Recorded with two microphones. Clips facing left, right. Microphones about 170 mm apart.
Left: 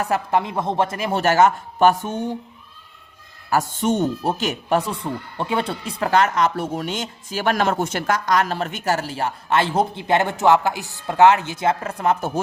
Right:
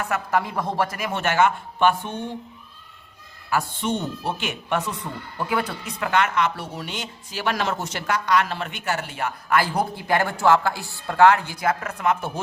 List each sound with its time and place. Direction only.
0.0 s speech: 30° left (ahead or behind)
3.5 s speech: 45° left (ahead or behind)